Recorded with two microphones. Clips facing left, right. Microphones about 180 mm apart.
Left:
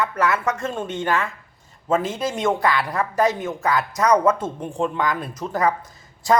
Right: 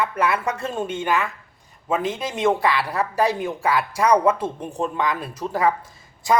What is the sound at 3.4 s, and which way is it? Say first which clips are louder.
Speech: even; 30° right (ahead or behind).